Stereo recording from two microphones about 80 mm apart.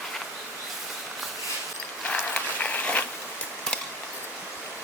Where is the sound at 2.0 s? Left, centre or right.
Centre.